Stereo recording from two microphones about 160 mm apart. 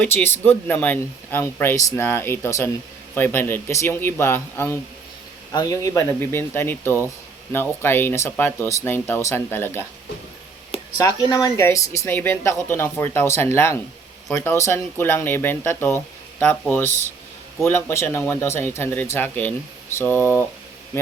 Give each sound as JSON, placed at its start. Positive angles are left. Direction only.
{"t": 0.0, "sound": "speech", "side_deg": 15}
{"t": 11.0, "sound": "speech", "side_deg": 25}